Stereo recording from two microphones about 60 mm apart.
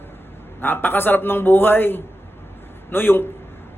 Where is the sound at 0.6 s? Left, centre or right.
Left.